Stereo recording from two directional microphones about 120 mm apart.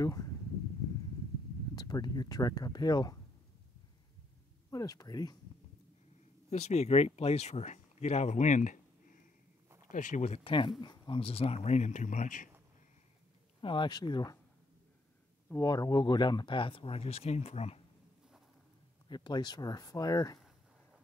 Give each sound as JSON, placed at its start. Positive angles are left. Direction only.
{"t": 0.0, "sound": "speech", "side_deg": 30}
{"t": 1.8, "sound": "speech", "side_deg": 35}
{"t": 4.6, "sound": "speech", "side_deg": 30}
{"t": 6.5, "sound": "speech", "side_deg": 65}
{"t": 9.8, "sound": "speech", "side_deg": 90}
{"t": 10.4, "sound": "speech", "side_deg": 40}
{"t": 13.6, "sound": "speech", "side_deg": 45}
{"t": 15.6, "sound": "speech", "side_deg": 30}
{"t": 19.0, "sound": "speech", "side_deg": 40}